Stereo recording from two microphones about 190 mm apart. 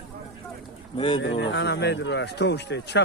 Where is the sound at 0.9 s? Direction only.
25° left (ahead or behind).